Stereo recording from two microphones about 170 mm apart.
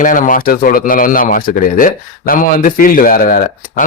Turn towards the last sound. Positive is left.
turn(degrees=55)  # may be behind; listen again after turning